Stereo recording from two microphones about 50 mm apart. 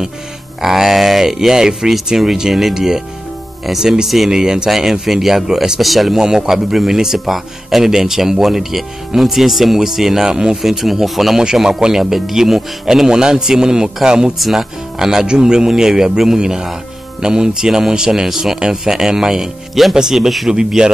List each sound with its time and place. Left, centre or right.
0.6 s a man's voice: centre
6.1 s a man's voice: centre
14.4 s a man's voice: centre